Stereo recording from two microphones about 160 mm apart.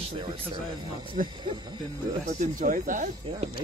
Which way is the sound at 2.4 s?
55° right (ahead or behind).